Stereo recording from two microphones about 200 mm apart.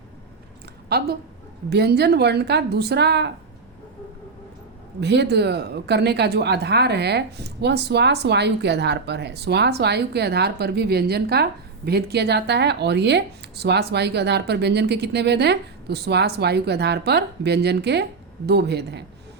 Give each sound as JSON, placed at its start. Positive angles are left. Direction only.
{"t": 0.9, "sound": "a woman's voice", "side_deg": -50}
{"t": 4.9, "sound": "a woman's voice", "side_deg": -55}